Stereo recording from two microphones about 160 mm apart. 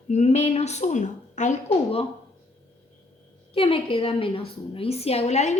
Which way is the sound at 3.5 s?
35° left (ahead or behind).